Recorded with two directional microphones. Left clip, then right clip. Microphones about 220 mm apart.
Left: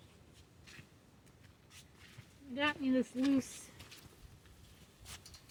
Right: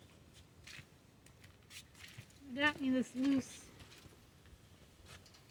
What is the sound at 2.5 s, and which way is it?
Speech, 35° right (ahead or behind).